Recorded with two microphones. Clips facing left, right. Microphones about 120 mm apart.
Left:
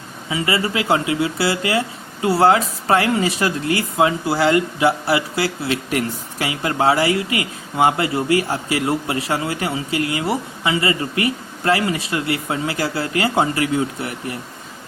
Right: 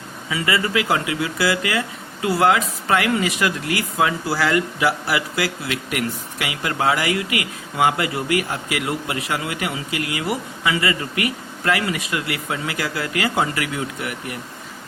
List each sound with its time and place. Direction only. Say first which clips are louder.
0.3 s speech: left 1 dB; 25° left (ahead or behind)